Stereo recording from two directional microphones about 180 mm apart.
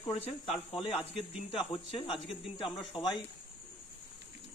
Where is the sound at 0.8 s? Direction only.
35° left (ahead or behind).